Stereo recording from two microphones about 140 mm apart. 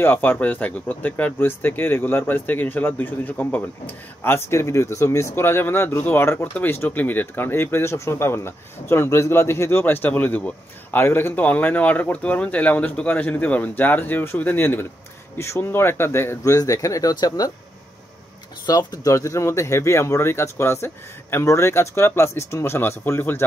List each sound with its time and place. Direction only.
0.0 s speech: 15° left (ahead or behind)
18.7 s speech: 30° left (ahead or behind)